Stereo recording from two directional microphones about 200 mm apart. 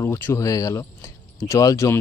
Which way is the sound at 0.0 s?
15° left (ahead or behind).